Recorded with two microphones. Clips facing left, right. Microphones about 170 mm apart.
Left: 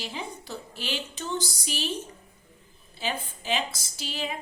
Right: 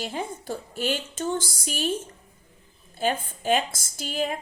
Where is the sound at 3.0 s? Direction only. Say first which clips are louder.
Right 6 dB; 50° right (ahead or behind).